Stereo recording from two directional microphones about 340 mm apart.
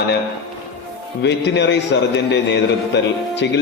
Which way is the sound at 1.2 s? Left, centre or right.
Left.